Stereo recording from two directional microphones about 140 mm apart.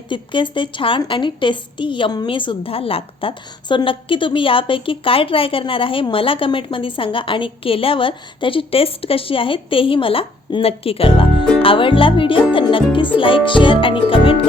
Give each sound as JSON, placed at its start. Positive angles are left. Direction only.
{"t": 0.1, "sound": "a woman's voice", "side_deg": 35}